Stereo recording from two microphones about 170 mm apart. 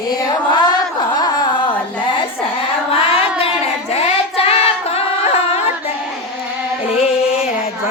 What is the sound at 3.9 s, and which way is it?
Music, 35° left (ahead or behind).